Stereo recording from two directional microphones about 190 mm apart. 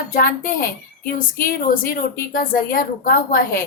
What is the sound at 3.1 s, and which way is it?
Speech, 50° left (ahead or behind).